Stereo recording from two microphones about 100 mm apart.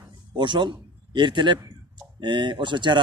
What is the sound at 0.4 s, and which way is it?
A man's voice, 50° right (ahead or behind).